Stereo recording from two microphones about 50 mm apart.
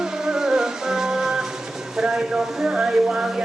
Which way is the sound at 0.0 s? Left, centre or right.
Centre.